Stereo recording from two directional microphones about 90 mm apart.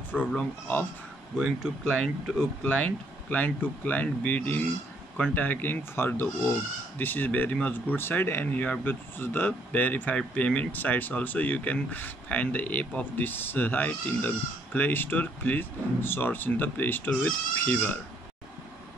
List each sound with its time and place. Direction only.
0.4 s speech: 25° left (ahead or behind)
1.4 s speech: centre (ahead or behind)
2.6 s speech: 15° left (ahead or behind)